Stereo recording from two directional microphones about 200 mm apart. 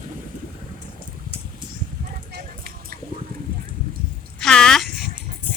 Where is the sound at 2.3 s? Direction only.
50° right (ahead or behind).